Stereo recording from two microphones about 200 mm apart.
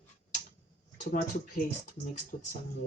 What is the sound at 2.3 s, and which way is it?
Speech, 35° left (ahead or behind).